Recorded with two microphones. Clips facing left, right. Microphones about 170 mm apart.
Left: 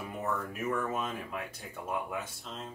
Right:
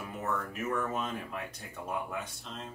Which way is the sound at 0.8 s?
10° left (ahead or behind).